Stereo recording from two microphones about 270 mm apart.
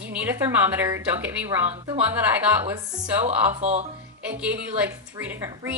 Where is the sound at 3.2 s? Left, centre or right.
Right.